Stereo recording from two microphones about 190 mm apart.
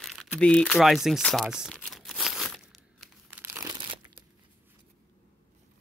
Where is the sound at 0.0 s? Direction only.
Centre (ahead or behind).